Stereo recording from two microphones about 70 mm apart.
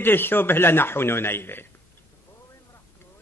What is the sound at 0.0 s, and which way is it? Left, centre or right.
A man's voice, left.